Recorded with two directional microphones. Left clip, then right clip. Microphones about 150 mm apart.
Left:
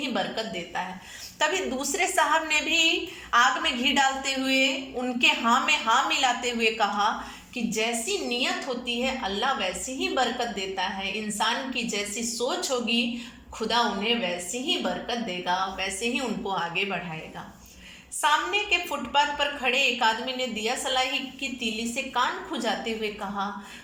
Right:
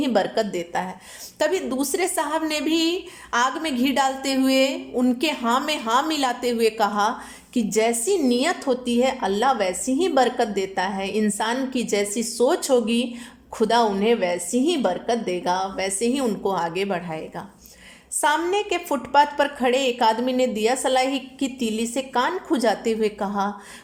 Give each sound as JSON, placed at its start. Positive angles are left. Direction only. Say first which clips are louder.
{"t": 0.0, "sound": "a woman's voice", "louder": "right 8 dB", "side_deg": -45}
{"t": 18.2, "sound": "a woman's voice", "louder": "right 3 dB", "side_deg": -45}